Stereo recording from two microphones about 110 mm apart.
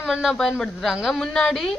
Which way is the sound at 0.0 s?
5° right (ahead or behind).